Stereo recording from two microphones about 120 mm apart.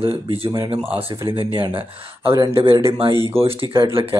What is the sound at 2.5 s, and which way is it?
Speech, 50° right (ahead or behind).